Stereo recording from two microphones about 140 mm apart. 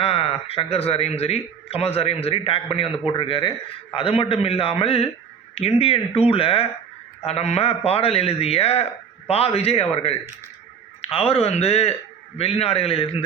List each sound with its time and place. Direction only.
0.0 s a man's voice: 45° left (ahead or behind)